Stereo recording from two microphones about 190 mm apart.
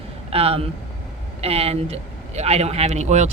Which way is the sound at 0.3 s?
30° right (ahead or behind).